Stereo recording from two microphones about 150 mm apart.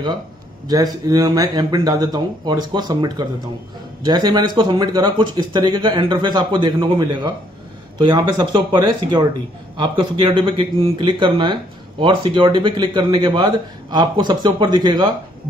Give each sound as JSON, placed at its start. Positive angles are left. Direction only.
{"t": 1.0, "sound": "speech", "side_deg": -25}